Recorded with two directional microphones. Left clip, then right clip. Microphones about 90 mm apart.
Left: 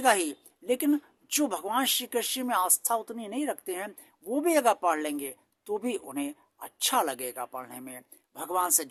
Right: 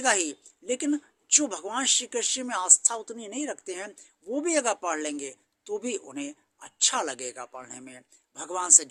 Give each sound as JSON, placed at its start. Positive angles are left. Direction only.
{"t": 0.0, "sound": "speech", "side_deg": 30}